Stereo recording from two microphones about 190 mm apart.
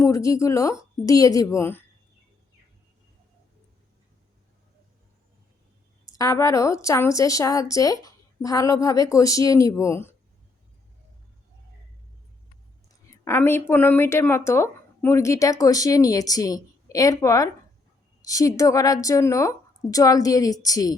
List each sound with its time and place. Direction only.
0.0 s a woman's voice: 15° left (ahead or behind)
6.1 s a woman's voice: 15° left (ahead or behind)
12.9 s a woman's voice: 15° left (ahead or behind)